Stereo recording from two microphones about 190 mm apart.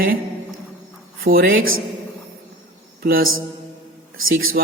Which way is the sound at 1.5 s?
90° right.